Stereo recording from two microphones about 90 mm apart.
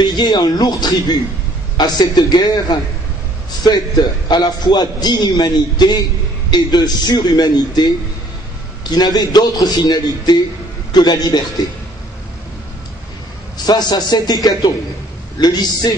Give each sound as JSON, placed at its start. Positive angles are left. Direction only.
{"t": 0.0, "sound": "a man's voice", "side_deg": 50}
{"t": 8.9, "sound": "a man's voice", "side_deg": 50}
{"t": 13.7, "sound": "a man's voice", "side_deg": 50}